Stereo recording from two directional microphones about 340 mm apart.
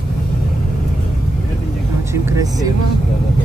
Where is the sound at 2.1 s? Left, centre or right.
Centre.